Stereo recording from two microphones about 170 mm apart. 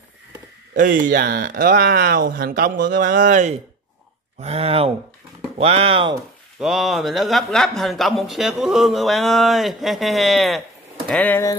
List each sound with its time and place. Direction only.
0.7 s speech: 50° right (ahead or behind); by 6.1 s 30° right (ahead or behind)
6.6 s a man's voice: centre (ahead or behind)